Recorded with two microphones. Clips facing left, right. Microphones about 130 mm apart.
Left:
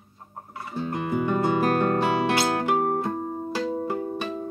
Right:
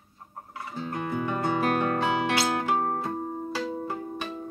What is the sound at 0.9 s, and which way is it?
Music, 10° left (ahead or behind).